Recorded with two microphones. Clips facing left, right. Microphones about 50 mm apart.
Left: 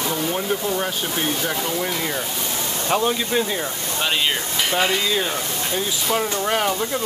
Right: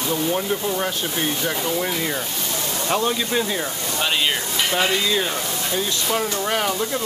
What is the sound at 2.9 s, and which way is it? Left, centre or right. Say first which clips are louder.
Speech: left 1 dB; centre.